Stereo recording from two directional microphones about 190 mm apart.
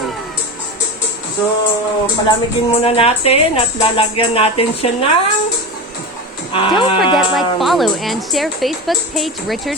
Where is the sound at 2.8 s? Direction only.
30° left (ahead or behind).